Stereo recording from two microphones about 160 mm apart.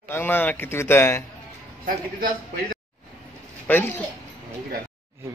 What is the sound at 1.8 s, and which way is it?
Speech, 60° right (ahead or behind).